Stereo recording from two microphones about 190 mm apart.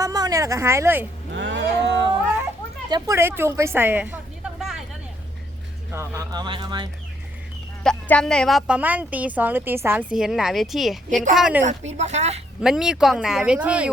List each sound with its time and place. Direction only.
0.0 s a woman's voice: 20° right (ahead or behind)
1.3 s a sound: 70° right (ahead or behind)
2.9 s a woman's voice: 15° right (ahead or behind)
5.9 s a woman's voice: 15° right (ahead or behind)
7.9 s a woman's voice: 5° left (ahead or behind)
11.9 s speech: 35° right (ahead or behind)
12.6 s speech: 5° right (ahead or behind)